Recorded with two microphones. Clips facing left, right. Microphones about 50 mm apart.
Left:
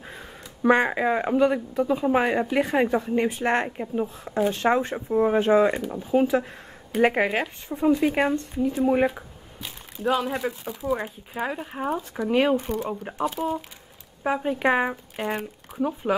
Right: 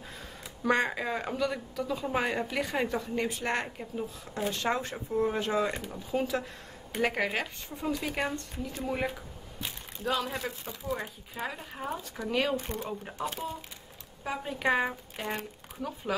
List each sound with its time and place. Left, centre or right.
0.0 s speech: left
10.0 s speech: centre
12.5 s speech: centre